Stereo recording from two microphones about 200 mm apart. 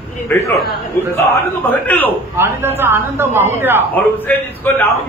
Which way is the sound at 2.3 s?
10° right (ahead or behind).